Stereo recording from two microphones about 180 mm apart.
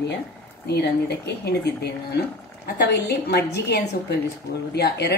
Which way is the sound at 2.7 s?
65° left (ahead or behind).